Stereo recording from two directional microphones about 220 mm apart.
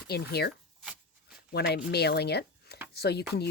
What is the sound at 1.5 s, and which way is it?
Speech, 45° left (ahead or behind).